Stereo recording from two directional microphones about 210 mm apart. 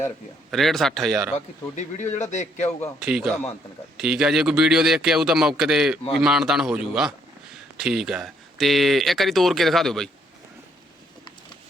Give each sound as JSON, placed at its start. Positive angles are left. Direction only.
{"t": 0.5, "sound": "speech", "side_deg": 0}
{"t": 1.7, "sound": "speech", "side_deg": 35}
{"t": 3.0, "sound": "speech", "side_deg": 0}